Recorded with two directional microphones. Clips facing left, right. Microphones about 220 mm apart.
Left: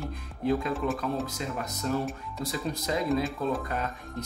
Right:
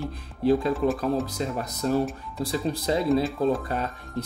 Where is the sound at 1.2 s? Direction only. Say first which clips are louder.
Right 4 dB; 35° right (ahead or behind).